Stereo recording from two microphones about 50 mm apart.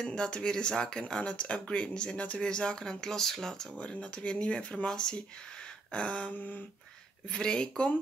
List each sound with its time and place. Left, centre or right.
0.0 s speech: centre
3.8 s speech: left